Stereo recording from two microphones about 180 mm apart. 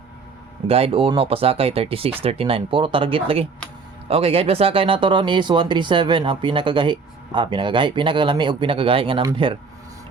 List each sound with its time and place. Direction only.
0.7 s speech: 30° right (ahead or behind)